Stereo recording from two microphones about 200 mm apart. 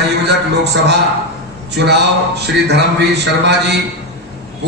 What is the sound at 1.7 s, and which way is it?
Speech, 55° right (ahead or behind).